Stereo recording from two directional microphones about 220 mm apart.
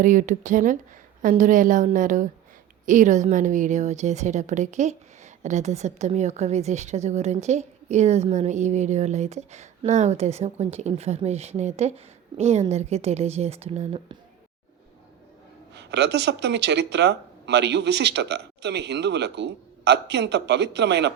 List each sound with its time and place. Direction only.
0.0 s a woman's voice: 35° right (ahead or behind)
15.7 s speech: 50° right (ahead or behind)